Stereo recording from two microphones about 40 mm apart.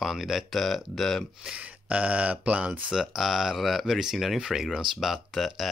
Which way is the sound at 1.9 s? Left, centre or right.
Right.